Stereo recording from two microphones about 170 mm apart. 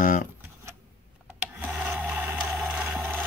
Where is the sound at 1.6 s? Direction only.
5° right (ahead or behind).